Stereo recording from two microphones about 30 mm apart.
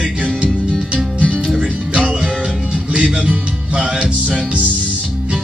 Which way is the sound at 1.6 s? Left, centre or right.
Right.